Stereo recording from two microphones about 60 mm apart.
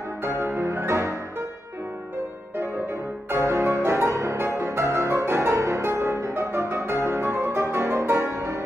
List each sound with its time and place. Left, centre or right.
0.2 s music: right
3.3 s music: right